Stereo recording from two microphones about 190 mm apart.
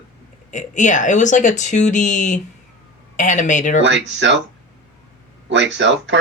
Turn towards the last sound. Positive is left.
turn(degrees=-75)  # may be behind; listen again after turning